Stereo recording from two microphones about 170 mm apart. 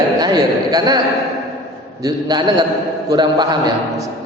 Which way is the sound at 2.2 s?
25° right (ahead or behind).